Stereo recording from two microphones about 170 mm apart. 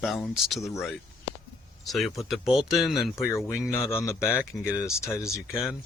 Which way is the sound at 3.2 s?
15° left (ahead or behind).